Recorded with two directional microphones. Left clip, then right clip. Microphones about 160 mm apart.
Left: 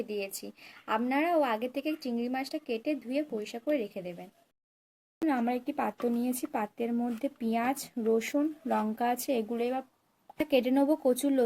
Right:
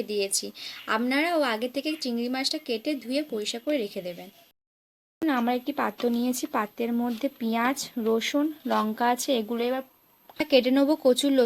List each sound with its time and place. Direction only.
0.0 s a woman's voice: 40° right (ahead or behind)
5.2 s speech: 20° right (ahead or behind)